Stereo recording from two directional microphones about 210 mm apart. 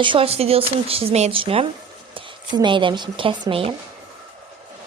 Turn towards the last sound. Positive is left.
turn(degrees=-25)  # may be behind; listen again after turning